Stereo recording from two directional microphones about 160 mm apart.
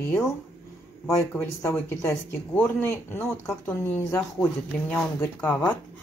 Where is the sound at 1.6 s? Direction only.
15° left (ahead or behind).